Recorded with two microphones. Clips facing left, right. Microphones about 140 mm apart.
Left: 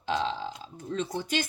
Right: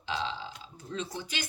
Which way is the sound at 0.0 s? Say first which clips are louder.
Left 5 dB; 50° left (ahead or behind).